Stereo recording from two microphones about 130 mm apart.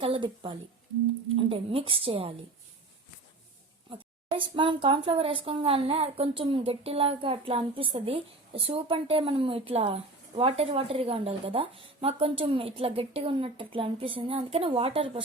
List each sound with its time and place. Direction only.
0.0 s a woman's voice: 40° right (ahead or behind)
3.8 s a woman's voice: 40° right (ahead or behind)